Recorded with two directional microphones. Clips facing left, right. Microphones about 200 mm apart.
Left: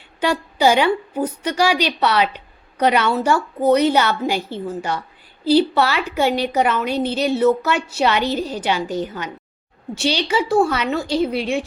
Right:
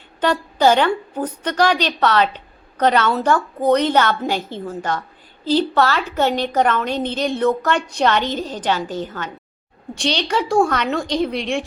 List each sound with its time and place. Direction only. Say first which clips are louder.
0.2 s a woman's voice: right 1 dB; 10° left (ahead or behind)